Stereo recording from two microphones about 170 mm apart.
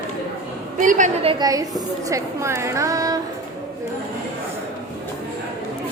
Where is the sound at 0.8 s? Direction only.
50° right (ahead or behind).